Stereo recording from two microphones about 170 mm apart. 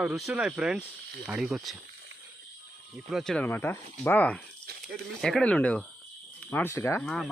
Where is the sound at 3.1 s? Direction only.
Centre (ahead or behind).